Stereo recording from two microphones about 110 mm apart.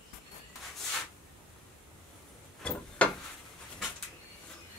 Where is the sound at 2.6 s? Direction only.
10° left (ahead or behind).